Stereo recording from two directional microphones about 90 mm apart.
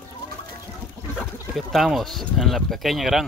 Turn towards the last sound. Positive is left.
turn(degrees=0)  # may be behind; listen again after turning